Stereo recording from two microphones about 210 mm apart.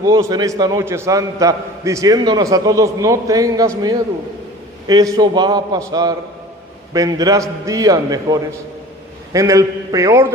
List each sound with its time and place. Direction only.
0.0 s a man's voice: 15° right (ahead or behind)
4.9 s a man's voice: 15° right (ahead or behind)